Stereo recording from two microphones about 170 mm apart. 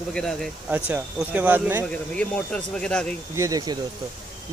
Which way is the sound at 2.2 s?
5° left (ahead or behind).